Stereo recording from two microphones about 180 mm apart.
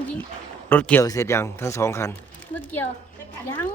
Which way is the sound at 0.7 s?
10° left (ahead or behind).